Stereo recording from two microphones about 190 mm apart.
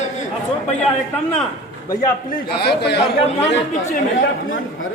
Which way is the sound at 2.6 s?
60° left (ahead or behind).